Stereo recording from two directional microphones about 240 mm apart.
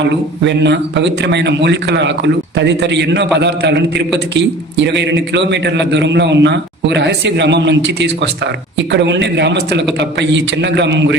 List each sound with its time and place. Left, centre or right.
0.0 s a man's voice: right